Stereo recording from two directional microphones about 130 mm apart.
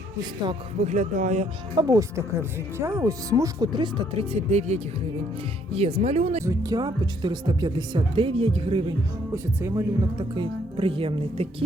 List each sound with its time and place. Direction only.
0.8 s speech: 65° right (ahead or behind)
1.7 s speech: 30° right (ahead or behind); by 6.4 s 60° right (ahead or behind)
6.4 s speech: 25° right (ahead or behind); by 9.0 s 40° right (ahead or behind)
9.3 s speech: 20° right (ahead or behind); by 11.4 s 45° right (ahead or behind)